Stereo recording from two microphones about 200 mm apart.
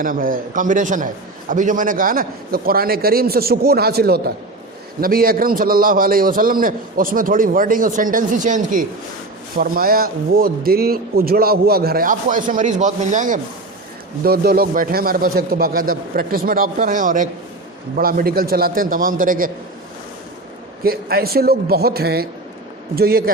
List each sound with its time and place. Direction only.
0.0 s a man's voice: 45° right (ahead or behind)
20.8 s a man's voice: 50° right (ahead or behind)